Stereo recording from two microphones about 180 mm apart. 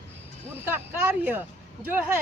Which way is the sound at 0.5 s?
10° right (ahead or behind).